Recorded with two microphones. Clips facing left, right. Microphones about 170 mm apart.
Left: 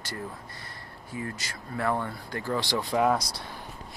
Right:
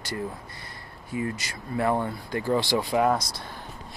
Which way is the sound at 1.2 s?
15° right (ahead or behind).